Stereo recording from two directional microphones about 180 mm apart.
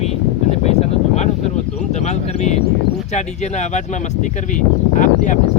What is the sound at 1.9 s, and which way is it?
Speech, 40° left (ahead or behind).